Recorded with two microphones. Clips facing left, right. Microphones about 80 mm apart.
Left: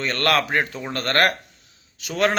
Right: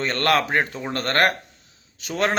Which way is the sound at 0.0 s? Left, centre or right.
Right.